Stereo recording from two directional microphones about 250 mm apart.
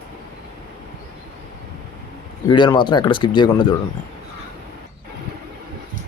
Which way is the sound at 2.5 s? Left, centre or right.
Centre.